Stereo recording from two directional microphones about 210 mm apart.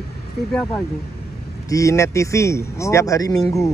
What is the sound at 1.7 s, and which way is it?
Speech, 15° left (ahead or behind).